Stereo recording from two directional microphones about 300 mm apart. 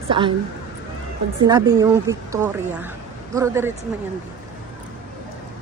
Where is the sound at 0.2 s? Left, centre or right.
Centre.